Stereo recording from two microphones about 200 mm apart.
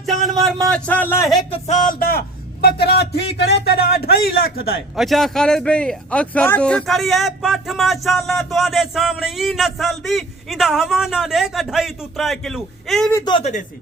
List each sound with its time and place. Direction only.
0.4 s a man's voice: 5° left (ahead or behind)
1.5 s a man's voice: 35° left (ahead or behind); by 4.1 s 50° left (ahead or behind)
4.9 s a man's voice: centre (ahead or behind)
13.1 s a man's voice: 15° left (ahead or behind)
13.3 s speech: 35° left (ahead or behind)